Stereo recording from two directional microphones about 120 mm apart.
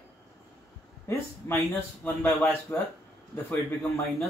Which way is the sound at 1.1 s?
25° left (ahead or behind).